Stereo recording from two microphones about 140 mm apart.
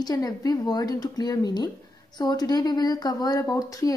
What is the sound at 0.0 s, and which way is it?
A woman's voice, 25° left (ahead or behind).